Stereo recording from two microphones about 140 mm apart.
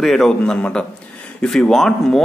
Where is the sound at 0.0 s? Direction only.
Centre (ahead or behind).